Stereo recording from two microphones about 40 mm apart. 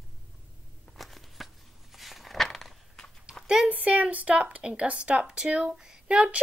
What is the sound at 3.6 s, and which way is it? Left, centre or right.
A child's voice, right.